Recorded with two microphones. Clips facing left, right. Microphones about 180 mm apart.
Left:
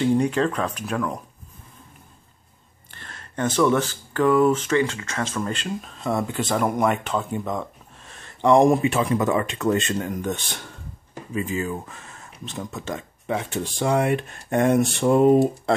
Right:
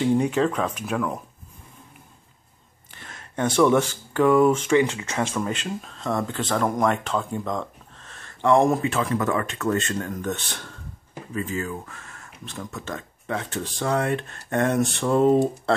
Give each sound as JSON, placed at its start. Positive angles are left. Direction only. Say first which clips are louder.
{"t": 0.0, "sound": "speech", "louder": "even", "side_deg": -5}
{"t": 2.9, "sound": "a sound", "louder": "even", "side_deg": -5}
{"t": 3.5, "sound": "speech", "louder": "right 2 dB", "side_deg": -10}
{"t": 5.8, "sound": "speech", "louder": "left 1 dB", "side_deg": 5}